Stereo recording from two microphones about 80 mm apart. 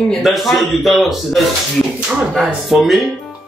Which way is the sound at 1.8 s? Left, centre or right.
Centre.